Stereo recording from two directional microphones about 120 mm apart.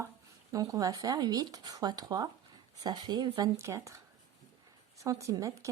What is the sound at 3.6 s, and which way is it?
Speech, 25° right (ahead or behind).